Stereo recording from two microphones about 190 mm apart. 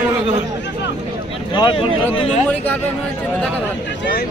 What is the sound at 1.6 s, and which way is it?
Speech, 25° left (ahead or behind).